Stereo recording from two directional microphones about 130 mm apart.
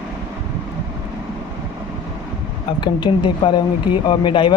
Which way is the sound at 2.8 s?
35° left (ahead or behind).